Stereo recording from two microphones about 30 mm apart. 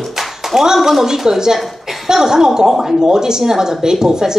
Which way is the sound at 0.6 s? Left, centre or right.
Centre.